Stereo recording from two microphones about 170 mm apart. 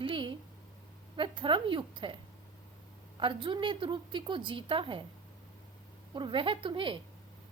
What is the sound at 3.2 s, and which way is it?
A woman's voice, 30° right (ahead or behind).